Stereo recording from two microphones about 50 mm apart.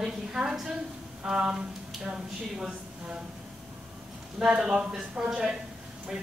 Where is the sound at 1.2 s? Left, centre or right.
Centre.